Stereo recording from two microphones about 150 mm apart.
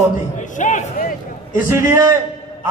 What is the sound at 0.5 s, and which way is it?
A man's voice, 55° left (ahead or behind).